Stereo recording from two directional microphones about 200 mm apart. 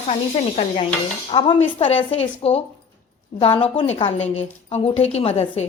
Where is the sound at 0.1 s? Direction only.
30° left (ahead or behind).